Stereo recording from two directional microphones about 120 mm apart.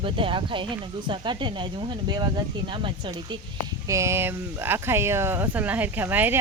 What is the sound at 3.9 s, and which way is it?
Speech, 25° right (ahead or behind).